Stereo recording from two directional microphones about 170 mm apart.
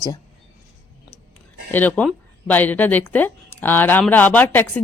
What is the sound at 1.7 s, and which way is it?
Speech, 10° left (ahead or behind).